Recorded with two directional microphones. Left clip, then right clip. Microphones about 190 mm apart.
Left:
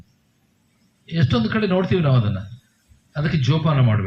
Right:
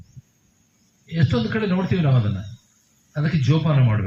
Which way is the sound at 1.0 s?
40° left (ahead or behind).